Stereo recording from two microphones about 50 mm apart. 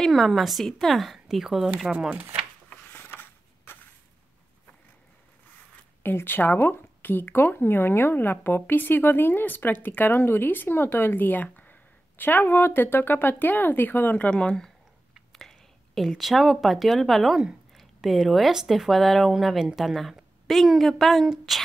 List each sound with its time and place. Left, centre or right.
0.0 s a woman's voice: centre
1.9 s speech: right
2.9 s a sound: left
6.0 s speech: left
14.3 s speech: centre
15.3 s a woman's voice: centre